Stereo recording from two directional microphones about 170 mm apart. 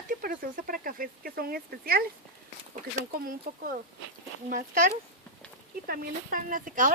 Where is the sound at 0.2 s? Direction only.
55° right (ahead or behind).